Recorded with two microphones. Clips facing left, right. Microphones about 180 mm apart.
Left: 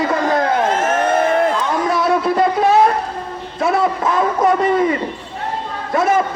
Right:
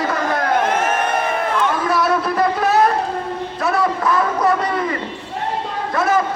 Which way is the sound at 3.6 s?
20° left (ahead or behind).